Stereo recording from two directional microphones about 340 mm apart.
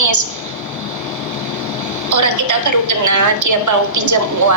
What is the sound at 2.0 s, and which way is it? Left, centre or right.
Speech, right.